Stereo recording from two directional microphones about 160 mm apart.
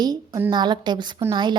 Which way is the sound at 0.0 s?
25° right (ahead or behind).